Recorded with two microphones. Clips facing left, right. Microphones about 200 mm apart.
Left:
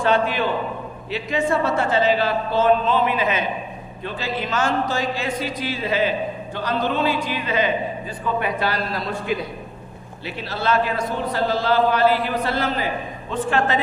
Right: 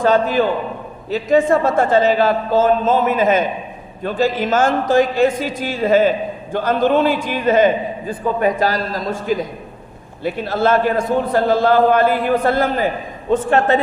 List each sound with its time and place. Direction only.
0.0 s a man's voice: 40° right (ahead or behind)